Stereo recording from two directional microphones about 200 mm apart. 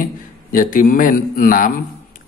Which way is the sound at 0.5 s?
45° left (ahead or behind).